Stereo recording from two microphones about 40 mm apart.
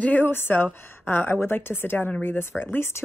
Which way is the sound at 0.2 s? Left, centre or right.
Left.